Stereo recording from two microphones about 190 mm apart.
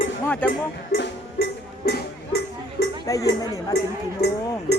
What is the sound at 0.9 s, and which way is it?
Music, 60° left (ahead or behind).